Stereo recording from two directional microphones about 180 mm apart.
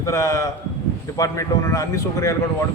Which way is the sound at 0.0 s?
15° left (ahead or behind).